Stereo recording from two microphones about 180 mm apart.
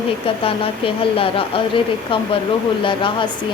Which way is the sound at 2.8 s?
30° left (ahead or behind).